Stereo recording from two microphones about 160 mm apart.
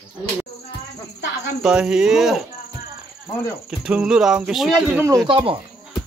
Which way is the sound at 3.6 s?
5° right (ahead or behind).